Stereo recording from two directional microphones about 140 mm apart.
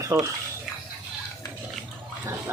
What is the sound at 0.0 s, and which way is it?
Speech, 25° right (ahead or behind).